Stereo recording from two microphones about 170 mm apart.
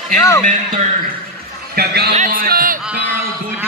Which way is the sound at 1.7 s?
65° right (ahead or behind).